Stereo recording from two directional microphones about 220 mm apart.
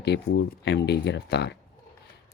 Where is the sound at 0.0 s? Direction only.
50° left (ahead or behind).